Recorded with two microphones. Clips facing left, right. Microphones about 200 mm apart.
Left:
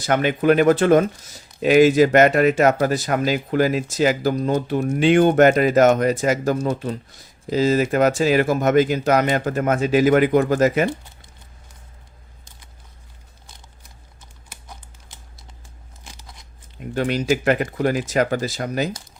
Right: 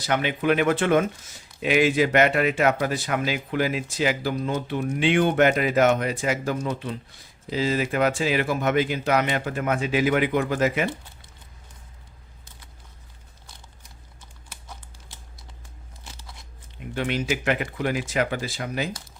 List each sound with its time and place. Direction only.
0.0 s speech: 45° left (ahead or behind)
16.0 s scissors: 15° left (ahead or behind)
16.9 s speech: 40° left (ahead or behind)